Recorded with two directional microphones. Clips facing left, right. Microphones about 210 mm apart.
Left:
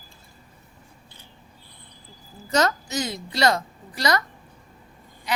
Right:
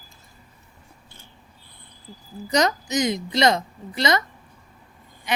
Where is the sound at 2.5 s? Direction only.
15° right (ahead or behind).